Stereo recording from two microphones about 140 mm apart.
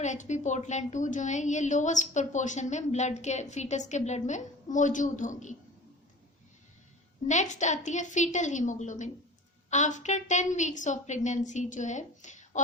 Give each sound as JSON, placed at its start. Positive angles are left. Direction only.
{"t": 0.0, "sound": "a woman's voice", "side_deg": 60}
{"t": 7.3, "sound": "a woman's voice", "side_deg": 60}